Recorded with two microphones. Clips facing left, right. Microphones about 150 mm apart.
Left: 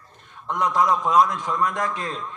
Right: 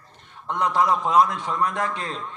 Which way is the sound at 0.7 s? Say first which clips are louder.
Even; 30° right (ahead or behind).